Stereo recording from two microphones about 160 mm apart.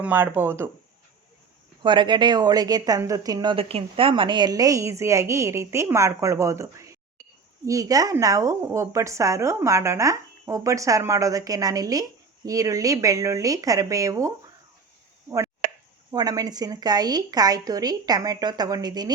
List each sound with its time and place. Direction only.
0.0 s speech: 10° right (ahead or behind)
1.8 s a woman's voice: 30° right (ahead or behind)
15.6 s a sound: 60° right (ahead or behind)
16.1 s a woman's voice: 25° right (ahead or behind)